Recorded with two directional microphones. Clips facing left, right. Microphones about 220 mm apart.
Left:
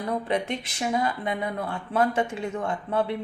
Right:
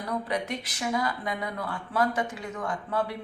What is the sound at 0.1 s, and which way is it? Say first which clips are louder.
Speech: left 3 dB; 25° left (ahead or behind).